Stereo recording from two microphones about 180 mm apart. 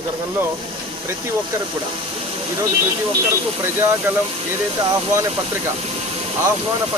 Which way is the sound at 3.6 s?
10° right (ahead or behind).